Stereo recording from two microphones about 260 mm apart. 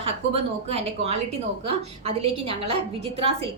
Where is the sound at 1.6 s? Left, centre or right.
Right.